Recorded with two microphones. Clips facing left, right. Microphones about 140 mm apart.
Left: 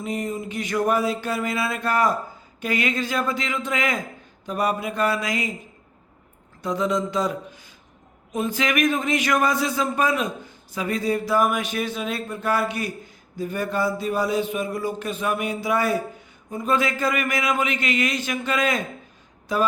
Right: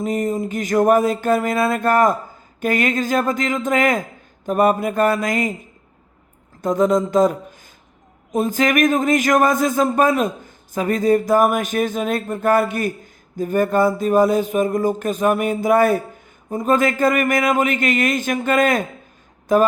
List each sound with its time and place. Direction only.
0.0 s speech: 45° right (ahead or behind)
6.6 s speech: 45° right (ahead or behind)